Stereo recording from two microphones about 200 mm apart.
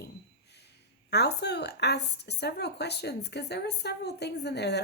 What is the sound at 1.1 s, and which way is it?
A woman's voice, 55° left (ahead or behind).